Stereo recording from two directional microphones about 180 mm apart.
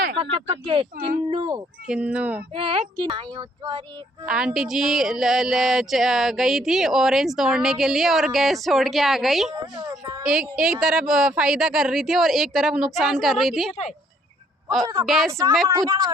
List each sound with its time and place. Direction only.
0.2 s speech: 30° right (ahead or behind)
1.9 s speech: 5° right (ahead or behind)
2.6 s speech: 30° right (ahead or behind)
4.3 s speech: 5° right (ahead or behind)
15.0 s speech: centre (ahead or behind)
15.3 s speech: 20° right (ahead or behind)